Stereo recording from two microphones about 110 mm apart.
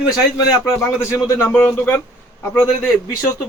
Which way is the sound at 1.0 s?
25° left (ahead or behind).